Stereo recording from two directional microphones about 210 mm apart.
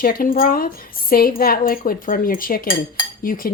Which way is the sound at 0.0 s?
40° left (ahead or behind).